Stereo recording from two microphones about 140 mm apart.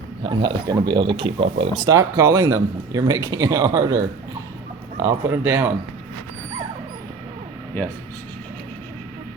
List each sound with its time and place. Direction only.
0.3 s speech: 30° right (ahead or behind)
1.9 s speech: 20° right (ahead or behind)
5.0 s speech: 15° right (ahead or behind)